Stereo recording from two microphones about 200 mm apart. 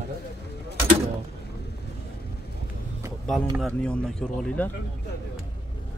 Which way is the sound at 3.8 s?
5° left (ahead or behind).